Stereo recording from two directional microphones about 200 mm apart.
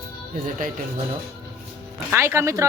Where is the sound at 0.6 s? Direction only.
40° right (ahead or behind).